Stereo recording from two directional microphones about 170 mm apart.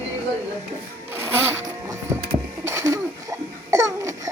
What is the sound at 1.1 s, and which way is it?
Zipper, 15° right (ahead or behind).